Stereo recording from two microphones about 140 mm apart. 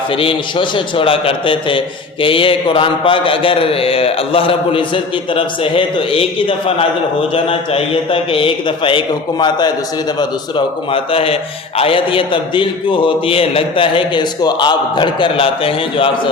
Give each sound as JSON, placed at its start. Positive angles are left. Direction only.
{"t": 0.2, "sound": "a man's voice", "side_deg": 40}
{"t": 10.9, "sound": "a man's voice", "side_deg": 40}